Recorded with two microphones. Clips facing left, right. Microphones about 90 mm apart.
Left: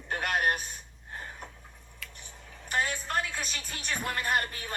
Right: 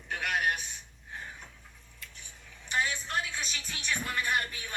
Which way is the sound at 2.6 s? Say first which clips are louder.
Left 1 dB; 45° left (ahead or behind).